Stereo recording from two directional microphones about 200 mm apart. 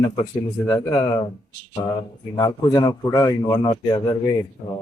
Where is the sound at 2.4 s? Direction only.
20° left (ahead or behind).